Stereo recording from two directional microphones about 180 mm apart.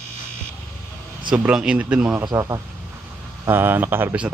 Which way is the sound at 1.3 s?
5° right (ahead or behind).